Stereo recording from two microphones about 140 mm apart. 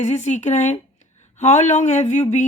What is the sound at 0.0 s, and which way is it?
Speech, 55° left (ahead or behind).